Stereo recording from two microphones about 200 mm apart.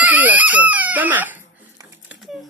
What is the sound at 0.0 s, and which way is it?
Chicken, 10° right (ahead or behind).